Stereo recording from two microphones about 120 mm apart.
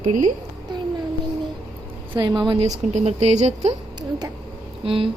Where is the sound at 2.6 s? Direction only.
70° right (ahead or behind).